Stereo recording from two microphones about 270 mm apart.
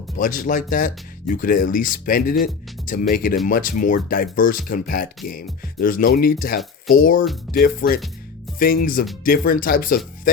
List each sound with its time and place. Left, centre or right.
0.2 s speech: left